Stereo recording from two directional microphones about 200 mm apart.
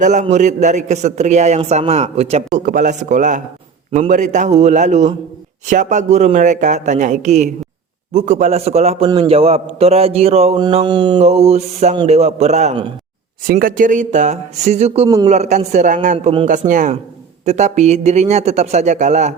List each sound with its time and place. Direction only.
0.0 s a man's voice: 35° right (ahead or behind)
13.5 s a man's voice: 45° right (ahead or behind)
15.0 s a man's voice: 20° right (ahead or behind)
15.3 s a man's voice: 35° right (ahead or behind)
16.5 s a man's voice: 40° right (ahead or behind)